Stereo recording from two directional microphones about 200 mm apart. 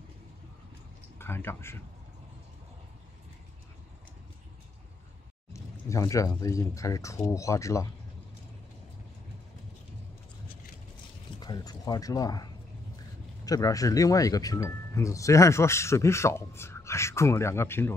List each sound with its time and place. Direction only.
1.1 s speech: 10° left (ahead or behind)
5.5 s speech: 15° left (ahead or behind)
11.3 s speech: 20° left (ahead or behind)
13.5 s speech: 15° left (ahead or behind)